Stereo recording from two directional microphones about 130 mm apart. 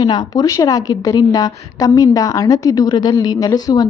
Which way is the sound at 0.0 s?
30° left (ahead or behind).